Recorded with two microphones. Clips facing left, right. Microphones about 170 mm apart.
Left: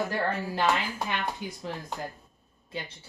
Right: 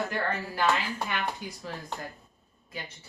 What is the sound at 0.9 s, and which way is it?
Speech, 20° left (ahead or behind).